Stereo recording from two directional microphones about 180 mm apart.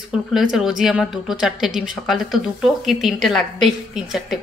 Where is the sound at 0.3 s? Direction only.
Centre (ahead or behind).